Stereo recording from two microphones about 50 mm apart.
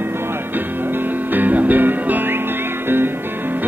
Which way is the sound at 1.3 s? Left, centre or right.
Right.